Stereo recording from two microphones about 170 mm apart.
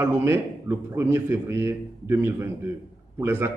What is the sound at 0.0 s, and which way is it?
A man's voice, 15° right (ahead or behind).